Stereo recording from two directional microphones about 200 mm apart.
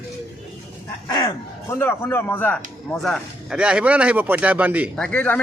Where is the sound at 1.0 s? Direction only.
20° left (ahead or behind); by 4.9 s 10° right (ahead or behind).